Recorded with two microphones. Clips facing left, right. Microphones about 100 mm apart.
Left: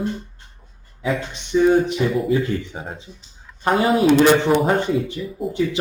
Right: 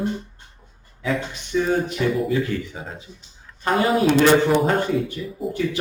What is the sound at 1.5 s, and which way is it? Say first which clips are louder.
Speech: left 5 dB; 20° left (ahead or behind).